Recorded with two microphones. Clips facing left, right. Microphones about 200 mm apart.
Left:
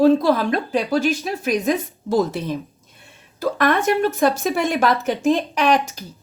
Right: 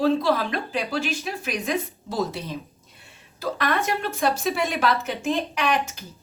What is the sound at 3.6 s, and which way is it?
Speech, 50° left (ahead or behind).